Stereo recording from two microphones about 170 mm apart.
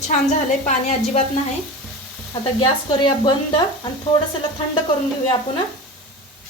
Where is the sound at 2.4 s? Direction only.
25° left (ahead or behind).